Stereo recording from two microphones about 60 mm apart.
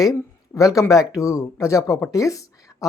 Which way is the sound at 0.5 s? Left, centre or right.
Left.